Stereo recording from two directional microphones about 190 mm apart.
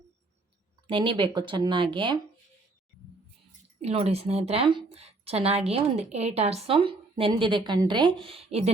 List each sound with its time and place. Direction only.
0.9 s speech: 25° right (ahead or behind)
3.8 s a woman's voice: 35° right (ahead or behind)